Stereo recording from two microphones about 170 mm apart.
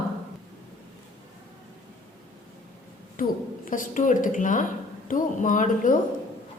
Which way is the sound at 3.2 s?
55° left (ahead or behind).